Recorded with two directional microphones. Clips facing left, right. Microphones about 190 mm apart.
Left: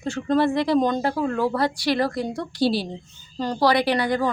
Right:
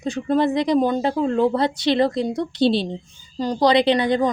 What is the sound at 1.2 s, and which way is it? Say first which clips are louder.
A woman's voice: right 5 dB; 20° right (ahead or behind).